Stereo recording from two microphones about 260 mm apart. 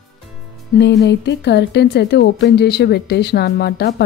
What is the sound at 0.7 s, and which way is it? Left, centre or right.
Speech, left.